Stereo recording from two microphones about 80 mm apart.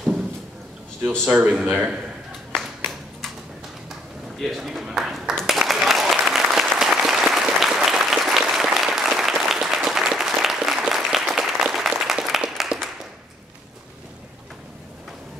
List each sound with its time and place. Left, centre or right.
1.3 s speech: centre
2.5 s clapping: centre
4.4 s applause: centre